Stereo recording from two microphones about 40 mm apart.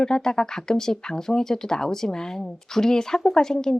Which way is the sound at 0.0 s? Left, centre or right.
Centre.